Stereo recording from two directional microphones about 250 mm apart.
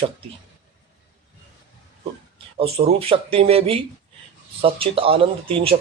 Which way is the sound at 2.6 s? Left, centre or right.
Right.